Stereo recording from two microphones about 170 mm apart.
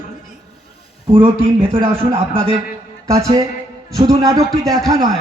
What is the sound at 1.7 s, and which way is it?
Speech, 35° right (ahead or behind).